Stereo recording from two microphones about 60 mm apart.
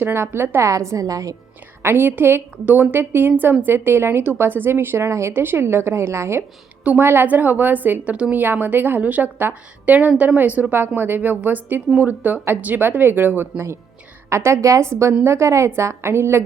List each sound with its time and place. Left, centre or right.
0.0 s a woman's voice: right
0.6 s a woman's voice: right
1.8 s a woman's voice: right
5.3 s a woman's voice: right
14.3 s a woman's voice: right